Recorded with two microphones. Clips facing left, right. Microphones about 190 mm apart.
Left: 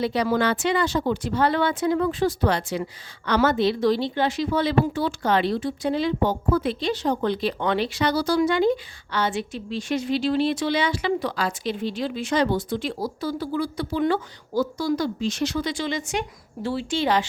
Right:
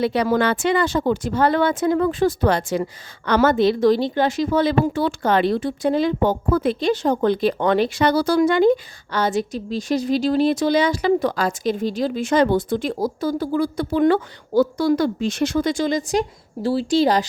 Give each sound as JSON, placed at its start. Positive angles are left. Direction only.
{"t": 0.0, "sound": "speech", "side_deg": -60}